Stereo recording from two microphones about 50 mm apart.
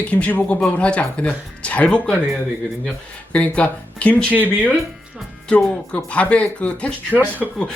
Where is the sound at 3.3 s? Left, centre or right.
Left.